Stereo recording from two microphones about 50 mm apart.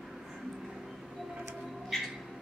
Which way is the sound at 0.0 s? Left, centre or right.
Centre.